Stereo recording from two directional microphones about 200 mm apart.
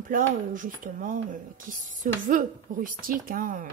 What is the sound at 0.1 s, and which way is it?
Speech, 40° right (ahead or behind).